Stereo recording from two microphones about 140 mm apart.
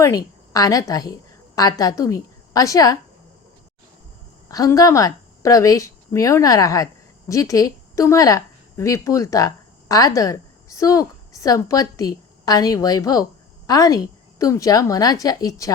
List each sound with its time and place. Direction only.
0.5 s a woman's voice: 25° left (ahead or behind)
4.4 s a woman's voice: 25° left (ahead or behind)